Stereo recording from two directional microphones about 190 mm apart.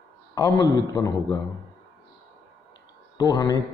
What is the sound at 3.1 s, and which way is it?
Speech, 20° left (ahead or behind).